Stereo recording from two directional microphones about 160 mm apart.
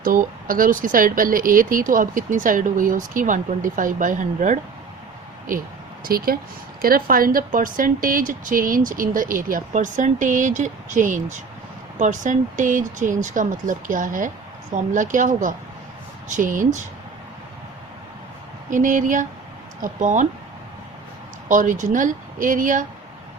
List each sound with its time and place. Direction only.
0.0 s speech: 60° right (ahead or behind)
6.1 s speech: 65° right (ahead or behind)
18.7 s speech: 55° right (ahead or behind)
21.5 s speech: 55° right (ahead or behind)